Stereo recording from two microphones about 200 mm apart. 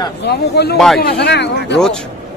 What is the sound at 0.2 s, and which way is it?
Speech, 55° left (ahead or behind).